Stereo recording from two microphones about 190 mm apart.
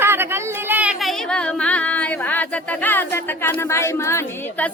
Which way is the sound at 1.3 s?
5° left (ahead or behind).